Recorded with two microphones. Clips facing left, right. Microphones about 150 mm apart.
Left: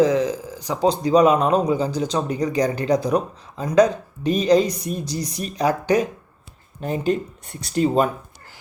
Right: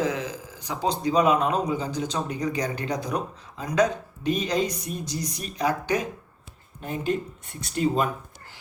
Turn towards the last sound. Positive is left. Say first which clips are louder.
# left 7 dB
turn(degrees=35)  # may be behind; listen again after turning